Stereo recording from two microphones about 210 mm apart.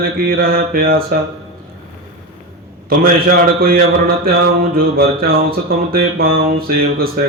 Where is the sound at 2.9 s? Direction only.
45° right (ahead or behind).